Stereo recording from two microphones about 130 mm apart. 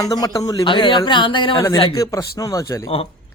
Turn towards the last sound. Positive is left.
turn(degrees=50)  # may be behind; listen again after turning